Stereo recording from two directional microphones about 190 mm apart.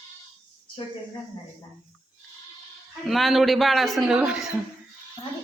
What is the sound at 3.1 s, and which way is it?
A woman's voice, centre (ahead or behind).